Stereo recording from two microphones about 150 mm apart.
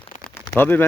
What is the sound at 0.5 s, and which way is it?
Speech, 10° left (ahead or behind).